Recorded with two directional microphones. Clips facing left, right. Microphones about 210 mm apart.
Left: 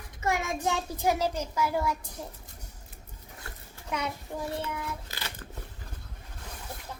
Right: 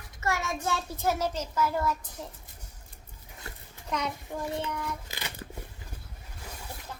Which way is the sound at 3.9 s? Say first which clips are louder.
Right 1 dB; 5° left (ahead or behind).